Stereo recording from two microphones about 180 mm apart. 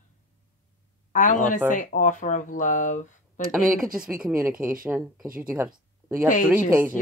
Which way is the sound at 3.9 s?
5° right (ahead or behind).